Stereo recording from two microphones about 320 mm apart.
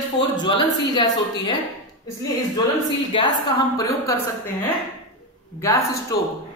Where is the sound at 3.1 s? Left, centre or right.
Centre.